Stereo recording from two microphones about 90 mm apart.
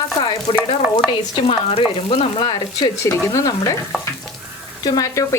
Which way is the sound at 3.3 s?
45° left (ahead or behind).